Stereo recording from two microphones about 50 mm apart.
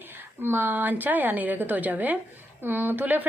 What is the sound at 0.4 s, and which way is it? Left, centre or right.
A woman's voice, right.